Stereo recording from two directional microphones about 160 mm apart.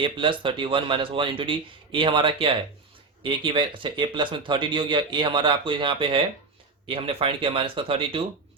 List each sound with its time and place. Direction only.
0.0 s speech: 30° right (ahead or behind)